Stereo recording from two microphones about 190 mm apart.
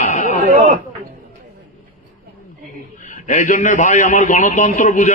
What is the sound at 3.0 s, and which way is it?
A man's voice, 40° left (ahead or behind).